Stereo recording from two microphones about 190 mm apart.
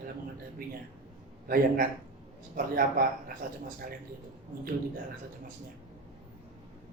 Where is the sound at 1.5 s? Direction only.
50° right (ahead or behind).